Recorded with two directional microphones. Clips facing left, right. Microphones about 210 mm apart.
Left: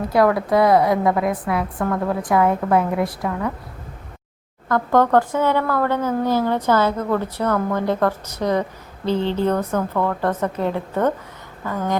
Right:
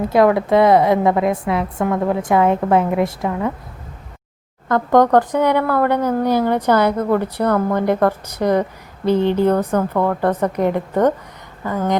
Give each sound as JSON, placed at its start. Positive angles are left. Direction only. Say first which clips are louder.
{"t": 0.1, "sound": "a woman's voice", "louder": "right 3 dB", "side_deg": -20}
{"t": 4.7, "sound": "a woman's voice", "louder": "right 3 dB", "side_deg": -20}